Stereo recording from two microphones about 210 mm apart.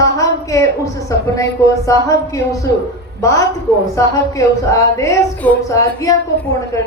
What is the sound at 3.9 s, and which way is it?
A woman's voice, 15° left (ahead or behind).